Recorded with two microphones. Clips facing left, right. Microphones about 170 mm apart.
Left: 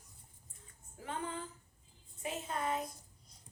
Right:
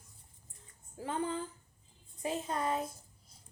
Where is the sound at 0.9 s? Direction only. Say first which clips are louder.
Right 6 dB; 30° right (ahead or behind).